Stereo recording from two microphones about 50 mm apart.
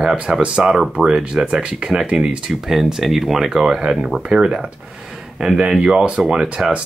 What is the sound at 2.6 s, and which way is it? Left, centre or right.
Speech, centre.